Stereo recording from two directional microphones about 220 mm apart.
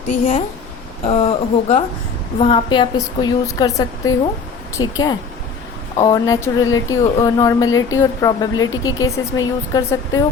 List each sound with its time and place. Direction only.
0.1 s a woman's voice: 35° left (ahead or behind); by 4.9 s 20° left (ahead or behind)
6.0 s speech: 15° left (ahead or behind)